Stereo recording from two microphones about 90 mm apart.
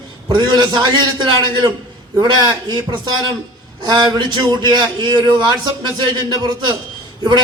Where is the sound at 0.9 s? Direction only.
55° right (ahead or behind).